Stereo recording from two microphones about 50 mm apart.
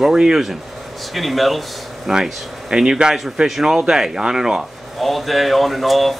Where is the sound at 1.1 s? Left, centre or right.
Centre.